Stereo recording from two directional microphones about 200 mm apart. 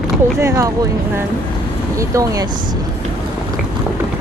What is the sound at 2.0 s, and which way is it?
Speech, 15° right (ahead or behind).